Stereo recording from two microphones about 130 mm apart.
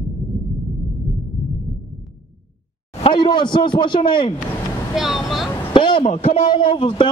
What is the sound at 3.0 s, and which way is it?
A man's voice, 35° left (ahead or behind).